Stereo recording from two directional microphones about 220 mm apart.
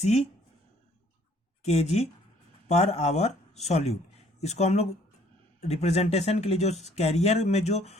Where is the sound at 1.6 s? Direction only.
30° left (ahead or behind).